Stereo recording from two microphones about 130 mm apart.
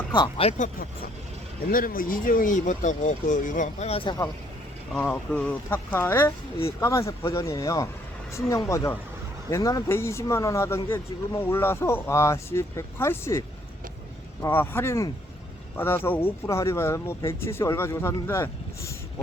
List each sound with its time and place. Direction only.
0.1 s speech: 40° left (ahead or behind)
1.7 s speech: 90° left
3.8 s speech: 45° left (ahead or behind)
4.9 s speech: 10° left (ahead or behind)
14.4 s speech: 15° left (ahead or behind)